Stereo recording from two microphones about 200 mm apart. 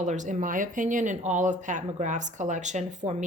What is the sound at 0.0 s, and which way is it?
Speech, 40° right (ahead or behind).